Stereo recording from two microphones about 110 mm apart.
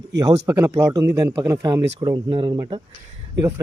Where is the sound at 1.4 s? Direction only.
35° right (ahead or behind).